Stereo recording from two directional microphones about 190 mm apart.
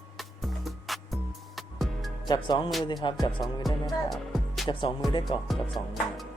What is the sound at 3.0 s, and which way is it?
Speech, 25° left (ahead or behind).